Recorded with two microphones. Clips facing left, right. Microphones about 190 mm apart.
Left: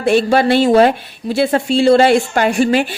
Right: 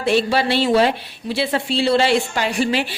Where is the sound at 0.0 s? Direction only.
50° left (ahead or behind).